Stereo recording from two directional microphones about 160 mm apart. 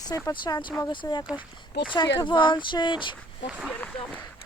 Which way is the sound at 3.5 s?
5° right (ahead or behind).